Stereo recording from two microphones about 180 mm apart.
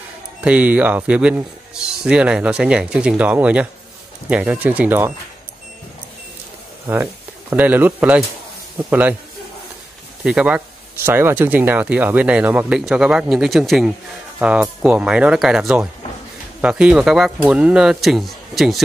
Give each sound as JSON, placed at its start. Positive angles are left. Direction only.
{"t": 0.4, "sound": "speech", "side_deg": -10}
{"t": 6.9, "sound": "speech", "side_deg": -15}
{"t": 10.2, "sound": "speech", "side_deg": -5}